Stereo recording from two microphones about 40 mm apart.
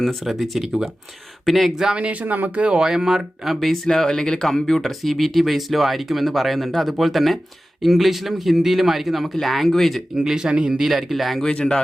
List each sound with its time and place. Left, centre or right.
0.3 s speech: centre
1.7 s speech: centre
2.0 s speech: right
2.2 s speech: right
2.7 s speech: centre
10.2 s speech: centre
10.8 s speech: centre
11.4 s speech: centre